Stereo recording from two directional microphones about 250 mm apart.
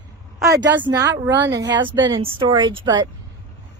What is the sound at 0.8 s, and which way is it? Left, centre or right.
Speech, centre.